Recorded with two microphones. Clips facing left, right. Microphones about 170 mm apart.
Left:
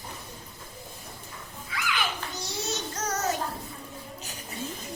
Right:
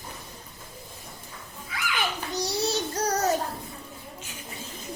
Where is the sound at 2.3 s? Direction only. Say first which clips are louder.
Right 11 dB; 35° right (ahead or behind).